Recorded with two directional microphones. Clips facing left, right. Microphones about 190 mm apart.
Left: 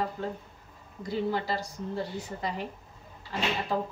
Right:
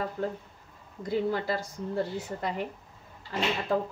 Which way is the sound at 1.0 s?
50° right (ahead or behind).